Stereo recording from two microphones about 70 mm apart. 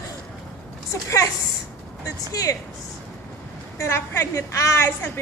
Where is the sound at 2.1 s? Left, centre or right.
Left.